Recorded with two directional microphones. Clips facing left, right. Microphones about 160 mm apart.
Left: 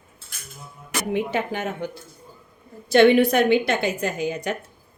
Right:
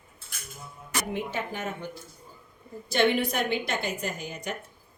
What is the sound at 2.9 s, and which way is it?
Speech, 70° left (ahead or behind).